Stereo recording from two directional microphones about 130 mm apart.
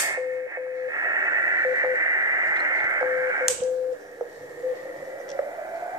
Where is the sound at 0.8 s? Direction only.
30° right (ahead or behind).